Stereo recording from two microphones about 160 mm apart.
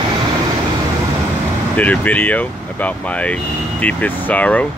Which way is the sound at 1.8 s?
10° left (ahead or behind).